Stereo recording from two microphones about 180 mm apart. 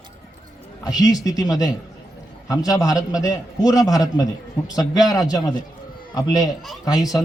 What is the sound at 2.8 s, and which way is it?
A man's voice, 20° left (ahead or behind).